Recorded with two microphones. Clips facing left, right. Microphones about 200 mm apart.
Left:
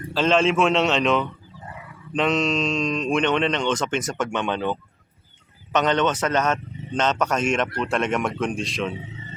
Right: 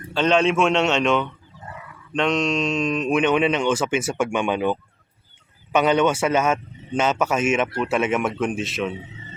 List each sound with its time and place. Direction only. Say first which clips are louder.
0.1 s a man's voice: right 1 dB; centre (ahead or behind)